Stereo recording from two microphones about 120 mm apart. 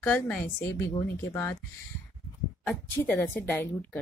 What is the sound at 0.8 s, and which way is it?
Speech, 20° left (ahead or behind).